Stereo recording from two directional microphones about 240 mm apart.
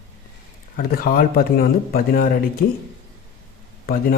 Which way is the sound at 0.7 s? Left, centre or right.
Left.